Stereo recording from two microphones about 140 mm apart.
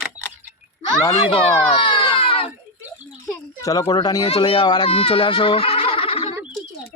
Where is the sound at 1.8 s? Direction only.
35° left (ahead or behind).